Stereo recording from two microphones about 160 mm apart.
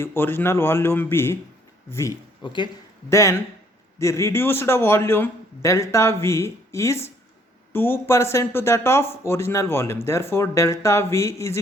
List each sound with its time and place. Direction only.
0.0 s a man's voice: 15° left (ahead or behind)
3.1 s a man's voice: 20° left (ahead or behind)